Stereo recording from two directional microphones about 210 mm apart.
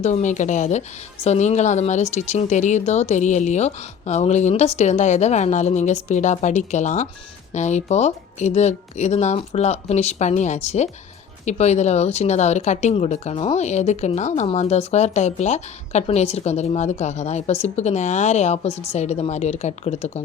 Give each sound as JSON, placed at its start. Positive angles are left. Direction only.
{"t": 0.0, "sound": "speech", "side_deg": 35}